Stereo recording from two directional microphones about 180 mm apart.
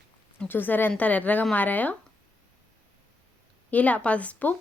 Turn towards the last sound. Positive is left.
turn(degrees=10)  # may be behind; listen again after turning